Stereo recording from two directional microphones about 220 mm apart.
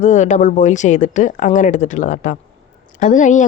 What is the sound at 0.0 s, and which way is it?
Speech, 35° left (ahead or behind).